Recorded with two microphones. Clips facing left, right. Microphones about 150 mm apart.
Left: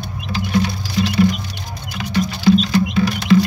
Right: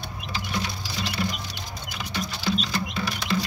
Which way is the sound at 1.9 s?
65° left (ahead or behind).